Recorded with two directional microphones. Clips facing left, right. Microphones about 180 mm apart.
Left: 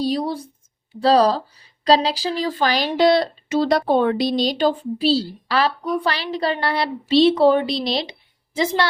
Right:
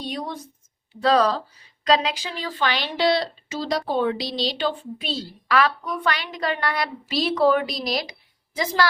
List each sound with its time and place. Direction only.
0.0 s a woman's voice: 35° left (ahead or behind)